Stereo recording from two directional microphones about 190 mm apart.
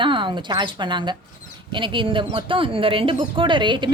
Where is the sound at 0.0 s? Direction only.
25° right (ahead or behind).